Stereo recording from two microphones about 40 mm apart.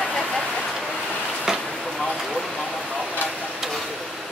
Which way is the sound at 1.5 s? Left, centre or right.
Centre.